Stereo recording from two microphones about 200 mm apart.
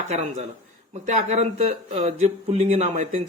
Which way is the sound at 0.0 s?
35° right (ahead or behind).